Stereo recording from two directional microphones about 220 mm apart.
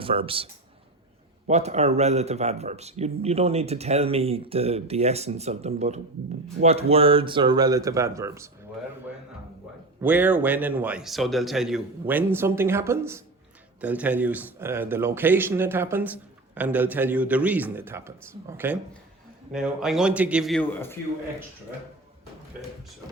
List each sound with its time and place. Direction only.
0.0 s speech: 25° right (ahead or behind)
1.5 s speech: 30° right (ahead or behind); by 8.4 s 15° right (ahead or behind)
10.0 s a man's voice: 5° right (ahead or behind); by 21.0 s 10° left (ahead or behind)